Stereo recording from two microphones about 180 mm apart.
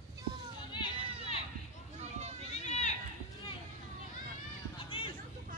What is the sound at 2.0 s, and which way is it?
Children playing, 40° right (ahead or behind).